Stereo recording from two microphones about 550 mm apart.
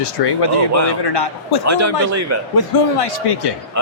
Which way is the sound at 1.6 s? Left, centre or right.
Right.